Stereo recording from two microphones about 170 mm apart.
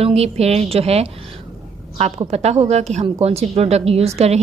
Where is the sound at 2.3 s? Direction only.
40° right (ahead or behind).